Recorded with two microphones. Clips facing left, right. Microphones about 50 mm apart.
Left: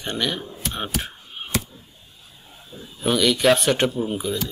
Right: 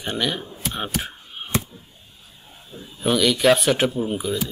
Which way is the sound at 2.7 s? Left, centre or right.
Centre.